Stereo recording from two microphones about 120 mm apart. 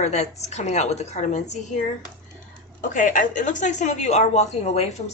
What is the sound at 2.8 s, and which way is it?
A woman's voice, 90° left.